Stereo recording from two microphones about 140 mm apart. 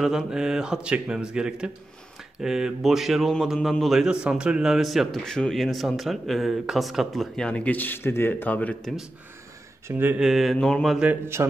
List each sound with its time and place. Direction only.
0.0 s speech: 5° right (ahead or behind)
9.8 s speech: 15° right (ahead or behind)
10.2 s speech: centre (ahead or behind)
11.1 s speech: 20° right (ahead or behind)